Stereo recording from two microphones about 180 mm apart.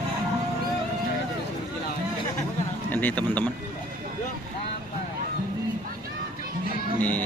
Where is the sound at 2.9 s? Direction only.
10° left (ahead or behind).